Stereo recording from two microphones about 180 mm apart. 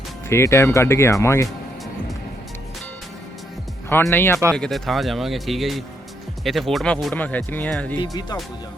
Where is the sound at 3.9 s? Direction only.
10° left (ahead or behind).